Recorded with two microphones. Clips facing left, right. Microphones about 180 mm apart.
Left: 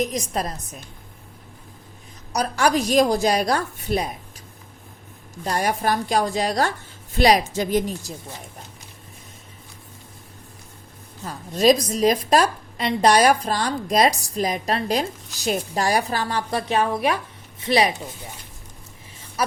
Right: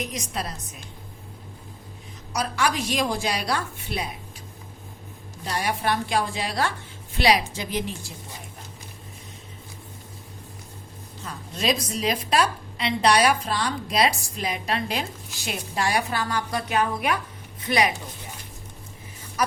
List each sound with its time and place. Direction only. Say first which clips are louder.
0.0 s a woman's voice: left 6 dB; 40° left (ahead or behind)
2.3 s a woman's voice: left 5 dB; 40° left (ahead or behind)
5.5 s a woman's voice: left 4 dB; 45° left (ahead or behind)
11.3 s a woman's voice: left 9 dB; 40° left (ahead or behind)